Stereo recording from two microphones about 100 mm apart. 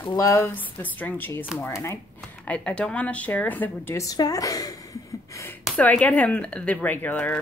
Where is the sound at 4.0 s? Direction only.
40° left (ahead or behind).